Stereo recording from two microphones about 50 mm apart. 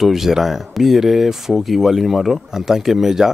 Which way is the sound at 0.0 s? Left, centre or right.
Centre.